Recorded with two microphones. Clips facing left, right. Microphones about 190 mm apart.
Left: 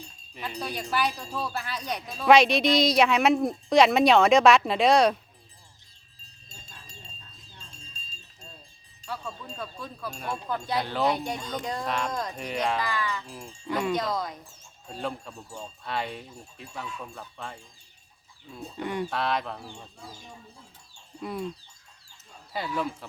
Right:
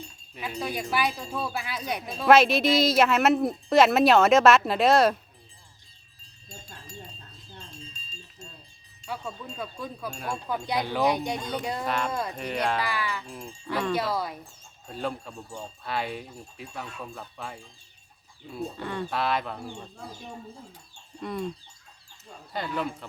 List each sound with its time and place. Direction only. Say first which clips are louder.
0.3 s speech: right 2 dB; 5° right (ahead or behind)
9.0 s speech: right 1 dB; 10° right (ahead or behind)
10.1 s speech: left 1 dB; 5° left (ahead or behind)
10.5 s speech: right 1 dB; 10° right (ahead or behind)
13.2 s speech: left 1 dB; centre (ahead or behind)
13.9 s speech: right 1 dB; 5° right (ahead or behind)
18.8 s speech: left 6 dB; 15° left (ahead or behind)
19.1 s speech: right 1 dB; centre (ahead or behind)
20.0 s speech: right 5 dB; 60° right (ahead or behind)
21.2 s speech: right 1 dB; centre (ahead or behind)
22.5 s speech: even; 5° left (ahead or behind)